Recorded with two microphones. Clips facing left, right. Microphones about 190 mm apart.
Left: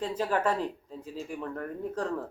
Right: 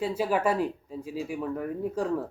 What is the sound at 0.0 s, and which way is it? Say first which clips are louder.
A man's voice: right 2 dB; 10° right (ahead or behind).